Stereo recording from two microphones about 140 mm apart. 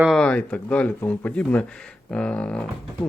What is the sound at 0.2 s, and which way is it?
Speech, 10° left (ahead or behind).